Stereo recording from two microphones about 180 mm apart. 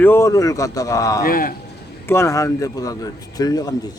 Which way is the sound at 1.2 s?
50° left (ahead or behind).